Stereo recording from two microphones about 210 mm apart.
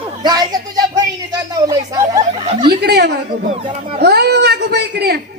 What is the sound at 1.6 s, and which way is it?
Speech, 15° right (ahead or behind).